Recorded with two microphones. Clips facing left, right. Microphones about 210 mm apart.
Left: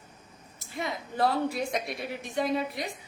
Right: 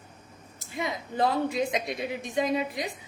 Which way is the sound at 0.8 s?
20° right (ahead or behind).